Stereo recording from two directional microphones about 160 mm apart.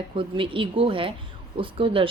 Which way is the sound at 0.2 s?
35° right (ahead or behind).